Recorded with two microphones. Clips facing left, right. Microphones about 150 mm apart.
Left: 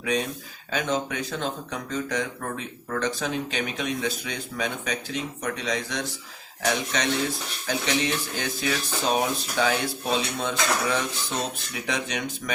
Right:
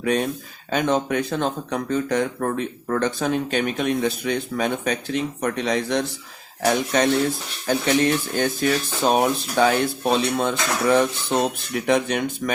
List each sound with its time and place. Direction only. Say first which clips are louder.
0.0 s speech: right 5 dB; 50° right (ahead or behind)